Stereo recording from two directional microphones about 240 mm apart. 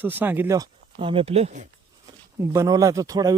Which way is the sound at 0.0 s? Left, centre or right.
Centre.